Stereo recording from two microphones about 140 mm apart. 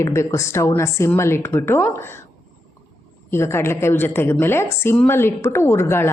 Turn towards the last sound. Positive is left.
turn(degrees=15)  # may be behind; listen again after turning